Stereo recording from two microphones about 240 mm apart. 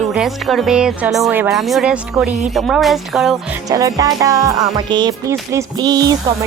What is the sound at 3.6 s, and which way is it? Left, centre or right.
Speech, centre.